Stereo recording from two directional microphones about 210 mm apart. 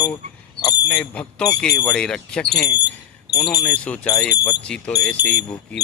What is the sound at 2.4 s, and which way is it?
Speech, 50° left (ahead or behind).